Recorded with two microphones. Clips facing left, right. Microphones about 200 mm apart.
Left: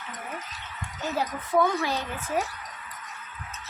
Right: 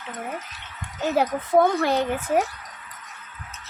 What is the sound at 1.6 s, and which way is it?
Speech, 60° right (ahead or behind).